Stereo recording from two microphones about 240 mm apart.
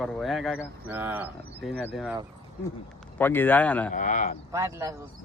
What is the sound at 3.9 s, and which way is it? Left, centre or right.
Speech, left.